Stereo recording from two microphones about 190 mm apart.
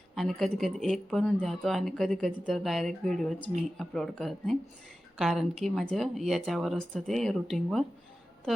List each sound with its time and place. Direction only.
0.2 s speech: centre (ahead or behind)